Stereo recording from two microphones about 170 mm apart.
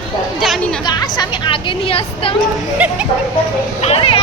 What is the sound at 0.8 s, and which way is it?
A woman's voice, 25° left (ahead or behind).